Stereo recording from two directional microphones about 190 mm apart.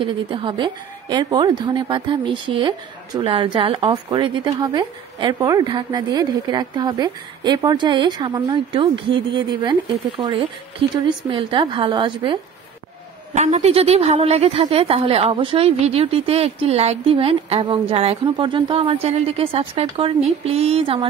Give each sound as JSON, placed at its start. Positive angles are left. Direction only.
{"t": 0.0, "sound": "a woman's voice", "side_deg": -25}
{"t": 13.3, "sound": "a woman's voice", "side_deg": -35}